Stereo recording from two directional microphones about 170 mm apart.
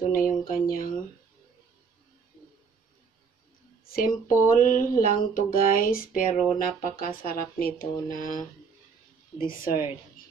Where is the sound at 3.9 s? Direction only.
55° left (ahead or behind).